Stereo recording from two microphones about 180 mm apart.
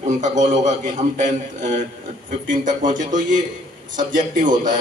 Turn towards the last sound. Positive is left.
turn(degrees=-45)  # may be behind; listen again after turning